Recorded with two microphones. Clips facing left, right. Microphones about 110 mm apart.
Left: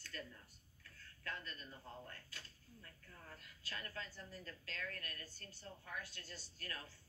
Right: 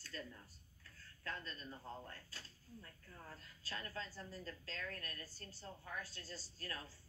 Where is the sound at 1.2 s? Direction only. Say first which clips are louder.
Right 1 dB; 30° right (ahead or behind).